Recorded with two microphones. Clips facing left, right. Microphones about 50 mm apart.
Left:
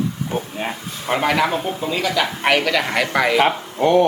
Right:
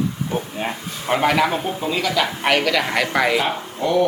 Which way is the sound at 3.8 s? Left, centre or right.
Left.